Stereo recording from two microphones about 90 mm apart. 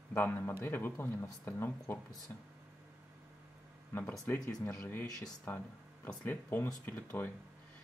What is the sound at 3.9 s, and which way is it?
Speech, 25° left (ahead or behind).